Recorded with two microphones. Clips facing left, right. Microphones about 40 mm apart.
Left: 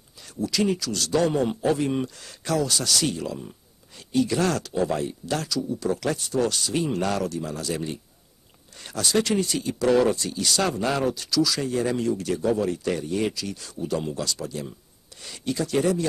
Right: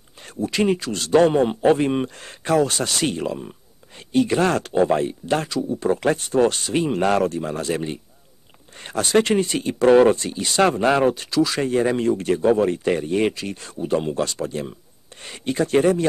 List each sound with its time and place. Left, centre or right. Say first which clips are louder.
0.2 s a man's voice: right 3 dB; right